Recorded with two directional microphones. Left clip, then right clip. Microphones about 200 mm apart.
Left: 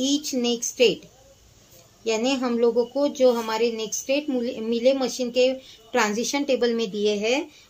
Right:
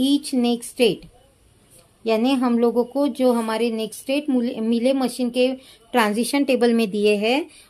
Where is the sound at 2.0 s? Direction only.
50° right (ahead or behind).